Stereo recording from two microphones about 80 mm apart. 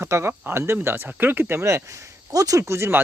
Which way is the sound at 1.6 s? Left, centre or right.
Right.